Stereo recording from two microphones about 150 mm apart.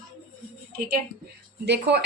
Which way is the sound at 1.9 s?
90° right.